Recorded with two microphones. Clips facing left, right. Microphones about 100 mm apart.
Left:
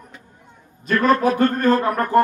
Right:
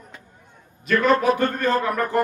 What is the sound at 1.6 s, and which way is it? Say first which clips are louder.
Speech: left 4 dB; 40° left (ahead or behind).